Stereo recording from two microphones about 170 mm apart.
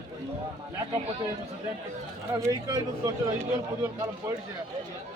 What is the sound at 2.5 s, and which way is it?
Speech, 20° right (ahead or behind).